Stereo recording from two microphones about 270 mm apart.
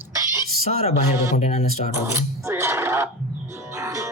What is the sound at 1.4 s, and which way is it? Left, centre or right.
Speech, left.